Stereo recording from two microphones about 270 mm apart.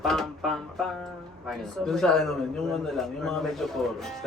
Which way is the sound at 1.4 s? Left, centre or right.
Centre.